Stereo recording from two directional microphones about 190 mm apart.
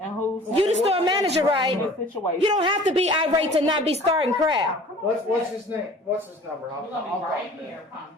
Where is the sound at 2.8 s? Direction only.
35° right (ahead or behind).